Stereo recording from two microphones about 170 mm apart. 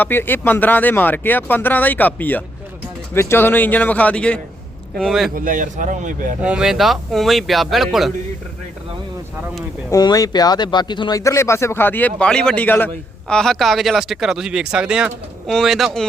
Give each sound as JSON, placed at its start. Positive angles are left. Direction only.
{"t": 0.0, "sound": "speech", "side_deg": 10}
{"t": 5.5, "sound": "speech", "side_deg": -50}
{"t": 6.4, "sound": "speech", "side_deg": -5}
{"t": 9.9, "sound": "speech", "side_deg": 20}